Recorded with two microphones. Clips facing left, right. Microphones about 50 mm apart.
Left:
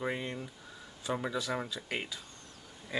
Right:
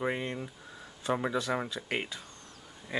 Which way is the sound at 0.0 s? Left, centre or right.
Centre.